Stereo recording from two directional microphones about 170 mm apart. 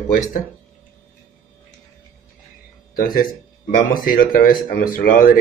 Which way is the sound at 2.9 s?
55° left (ahead or behind).